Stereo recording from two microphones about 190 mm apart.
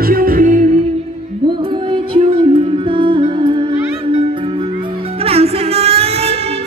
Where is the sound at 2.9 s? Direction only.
25° right (ahead or behind).